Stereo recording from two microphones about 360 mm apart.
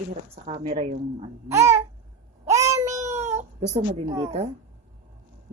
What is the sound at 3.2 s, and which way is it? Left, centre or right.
Speech, centre.